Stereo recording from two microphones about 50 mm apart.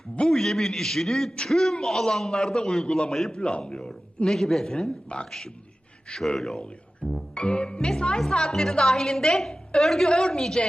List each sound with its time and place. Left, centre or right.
0.3 s a man's voice: centre
6.6 s speech: left